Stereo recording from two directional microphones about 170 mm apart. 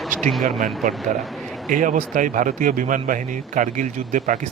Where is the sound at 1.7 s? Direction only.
50° right (ahead or behind).